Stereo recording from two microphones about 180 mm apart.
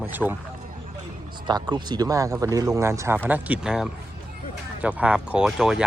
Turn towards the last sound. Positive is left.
turn(degrees=0)  # may be behind; listen again after turning